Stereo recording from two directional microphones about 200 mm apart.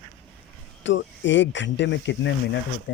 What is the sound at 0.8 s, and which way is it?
Speech, 65° left (ahead or behind).